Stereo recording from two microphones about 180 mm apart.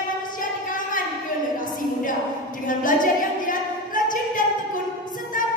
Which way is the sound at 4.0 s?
45° left (ahead or behind).